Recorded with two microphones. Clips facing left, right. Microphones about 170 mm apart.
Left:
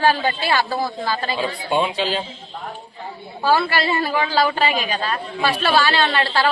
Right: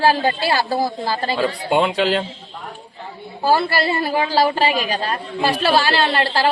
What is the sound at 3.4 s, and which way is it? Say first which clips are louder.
A woman's voice: right 1 dB; 35° right (ahead or behind).